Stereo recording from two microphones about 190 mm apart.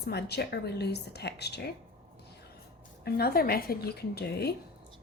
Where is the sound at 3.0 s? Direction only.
55° left (ahead or behind).